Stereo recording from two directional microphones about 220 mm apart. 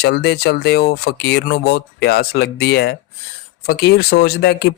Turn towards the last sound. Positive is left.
turn(degrees=45)  # may be behind; listen again after turning